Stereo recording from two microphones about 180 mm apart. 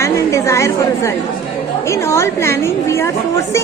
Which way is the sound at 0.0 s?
15° left (ahead or behind).